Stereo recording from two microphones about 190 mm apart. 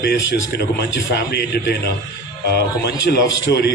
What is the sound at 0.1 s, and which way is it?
A man's voice, 60° left (ahead or behind).